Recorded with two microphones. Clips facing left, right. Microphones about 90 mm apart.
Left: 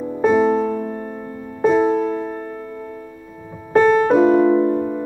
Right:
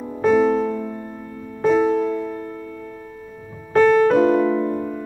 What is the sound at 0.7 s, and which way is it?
Music, 45° left (ahead or behind).